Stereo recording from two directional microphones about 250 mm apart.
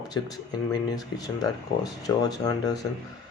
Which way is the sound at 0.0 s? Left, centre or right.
Centre.